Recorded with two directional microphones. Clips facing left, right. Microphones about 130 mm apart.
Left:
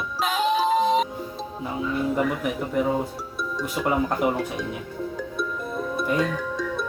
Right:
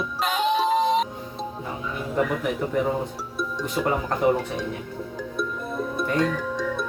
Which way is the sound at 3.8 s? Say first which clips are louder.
Right 1 dB; centre (ahead or behind).